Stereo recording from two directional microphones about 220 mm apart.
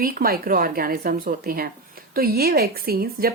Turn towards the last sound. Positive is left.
turn(degrees=-45)  # may be behind; listen again after turning